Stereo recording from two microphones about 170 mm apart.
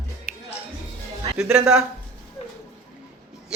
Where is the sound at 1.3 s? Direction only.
5° right (ahead or behind).